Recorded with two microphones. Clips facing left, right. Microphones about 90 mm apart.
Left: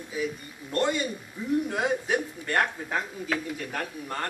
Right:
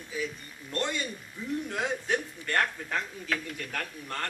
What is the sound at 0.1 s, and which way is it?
A man's voice, 10° left (ahead or behind).